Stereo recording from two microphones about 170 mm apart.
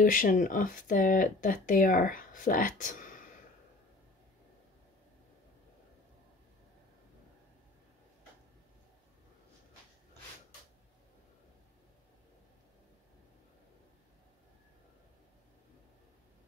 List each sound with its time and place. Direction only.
0.0 s speech: 55° left (ahead or behind)